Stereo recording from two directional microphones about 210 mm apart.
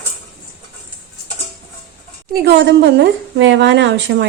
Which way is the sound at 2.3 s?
55° right (ahead or behind).